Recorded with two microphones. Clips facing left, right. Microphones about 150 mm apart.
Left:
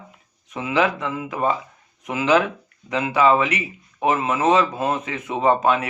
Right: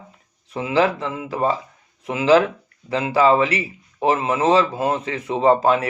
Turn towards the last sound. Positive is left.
turn(degrees=-30)  # may be behind; listen again after turning